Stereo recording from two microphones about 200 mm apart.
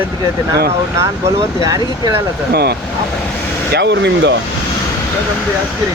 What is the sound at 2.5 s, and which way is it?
Speech, 55° right (ahead or behind).